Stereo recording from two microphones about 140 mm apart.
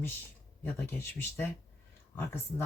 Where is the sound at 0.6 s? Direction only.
15° left (ahead or behind).